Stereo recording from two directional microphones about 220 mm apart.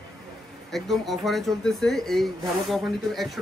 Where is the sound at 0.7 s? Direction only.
Centre (ahead or behind).